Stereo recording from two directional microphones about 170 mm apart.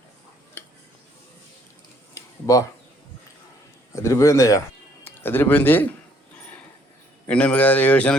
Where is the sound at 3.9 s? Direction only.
15° left (ahead or behind).